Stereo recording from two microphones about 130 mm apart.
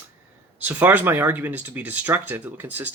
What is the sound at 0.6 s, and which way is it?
Speech, 15° right (ahead or behind).